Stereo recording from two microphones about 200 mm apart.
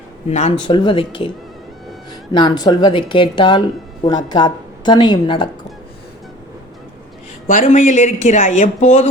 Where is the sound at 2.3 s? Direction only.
20° left (ahead or behind).